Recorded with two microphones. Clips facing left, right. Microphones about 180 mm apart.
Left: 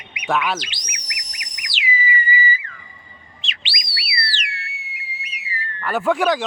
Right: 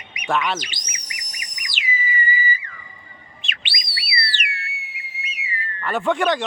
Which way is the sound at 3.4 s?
55° right (ahead or behind).